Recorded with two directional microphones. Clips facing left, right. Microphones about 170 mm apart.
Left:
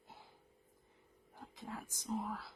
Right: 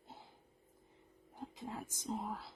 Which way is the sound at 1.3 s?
20° right (ahead or behind).